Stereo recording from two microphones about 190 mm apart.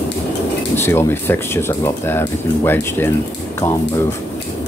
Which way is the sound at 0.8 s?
10° left (ahead or behind).